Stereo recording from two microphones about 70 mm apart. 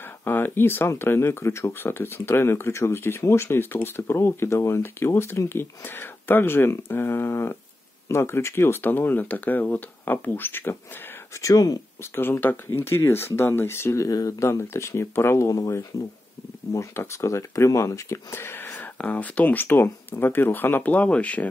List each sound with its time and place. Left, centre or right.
0.2 s speech: left
11.4 s speech: left
12.0 s speech: left
14.0 s speech: left
16.7 s speech: left; by 21.5 s centre